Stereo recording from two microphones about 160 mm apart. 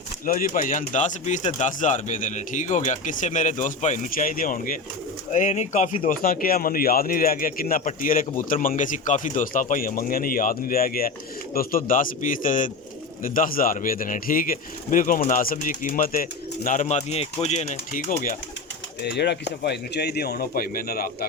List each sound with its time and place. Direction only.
0.3 s speech: 60° left (ahead or behind)
5.3 s a man's voice: 50° left (ahead or behind)
16.8 s speech: 40° left (ahead or behind); by 18.3 s 55° left (ahead or behind)
19.0 s speech: 90° left; by 21.2 s 70° left (ahead or behind)